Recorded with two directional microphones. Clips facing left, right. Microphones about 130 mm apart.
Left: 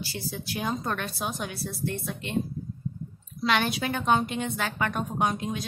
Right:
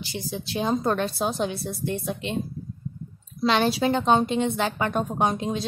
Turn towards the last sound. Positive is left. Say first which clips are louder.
# right 3 dB
turn(degrees=-30)  # may be behind; listen again after turning